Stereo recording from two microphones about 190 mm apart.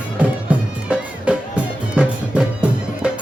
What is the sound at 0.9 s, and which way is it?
Music, 5° right (ahead or behind).